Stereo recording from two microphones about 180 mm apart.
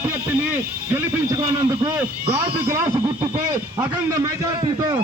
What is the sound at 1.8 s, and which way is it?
Speech, 30° right (ahead or behind).